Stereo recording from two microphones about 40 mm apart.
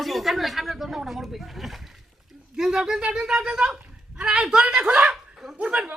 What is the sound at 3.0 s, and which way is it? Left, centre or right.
Speech, right.